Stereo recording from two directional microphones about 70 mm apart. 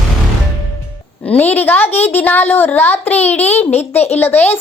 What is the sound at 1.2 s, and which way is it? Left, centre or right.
A woman's voice, left.